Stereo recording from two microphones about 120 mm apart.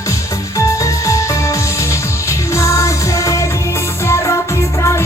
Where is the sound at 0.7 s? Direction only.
25° left (ahead or behind).